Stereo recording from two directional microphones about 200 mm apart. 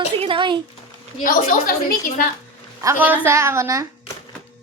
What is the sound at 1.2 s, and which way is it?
A woman's voice, 45° left (ahead or behind).